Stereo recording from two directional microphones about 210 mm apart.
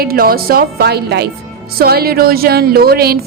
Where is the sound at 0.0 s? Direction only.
45° right (ahead or behind).